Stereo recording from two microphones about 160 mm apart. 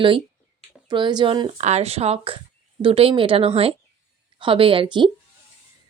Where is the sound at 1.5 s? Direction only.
45° right (ahead or behind).